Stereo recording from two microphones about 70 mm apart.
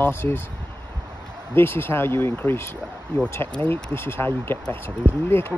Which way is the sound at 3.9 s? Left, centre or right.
Left.